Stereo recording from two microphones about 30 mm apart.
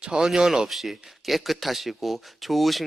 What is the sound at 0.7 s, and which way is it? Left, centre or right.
Speech, centre.